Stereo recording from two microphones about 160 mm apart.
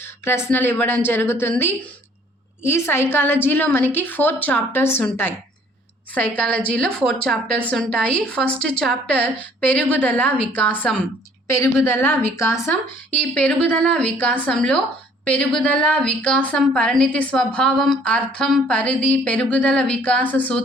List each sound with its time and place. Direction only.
0.3 s a woman's voice: 15° left (ahead or behind)